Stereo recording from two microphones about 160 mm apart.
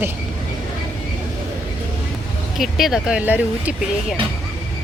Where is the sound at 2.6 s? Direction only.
Centre (ahead or behind).